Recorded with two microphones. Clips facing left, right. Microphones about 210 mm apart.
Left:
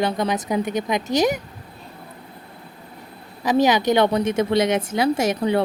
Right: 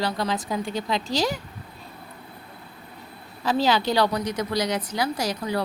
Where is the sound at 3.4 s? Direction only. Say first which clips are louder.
Left 5 dB; 15° left (ahead or behind).